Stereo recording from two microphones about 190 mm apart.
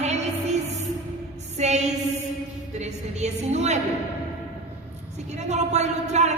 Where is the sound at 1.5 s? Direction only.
35° right (ahead or behind).